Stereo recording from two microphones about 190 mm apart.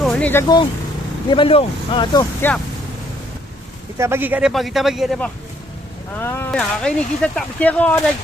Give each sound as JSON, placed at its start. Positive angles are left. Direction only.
{"t": 0.0, "sound": "vehicle", "side_deg": 5}
{"t": 0.4, "sound": "speech", "side_deg": 20}
{"t": 2.4, "sound": "speech", "side_deg": 10}
{"t": 3.9, "sound": "speech", "side_deg": -15}
{"t": 6.1, "sound": "speech", "side_deg": 10}